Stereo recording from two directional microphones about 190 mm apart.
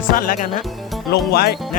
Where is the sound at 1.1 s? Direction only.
55° left (ahead or behind).